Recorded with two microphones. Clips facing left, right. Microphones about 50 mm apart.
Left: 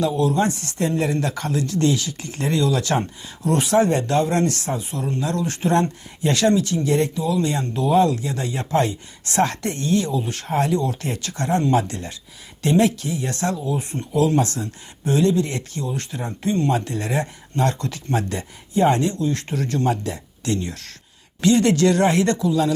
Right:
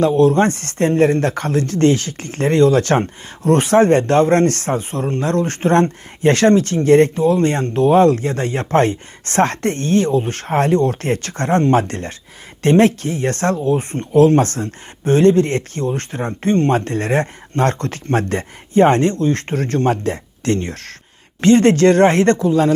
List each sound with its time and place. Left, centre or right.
0.0 s speech: right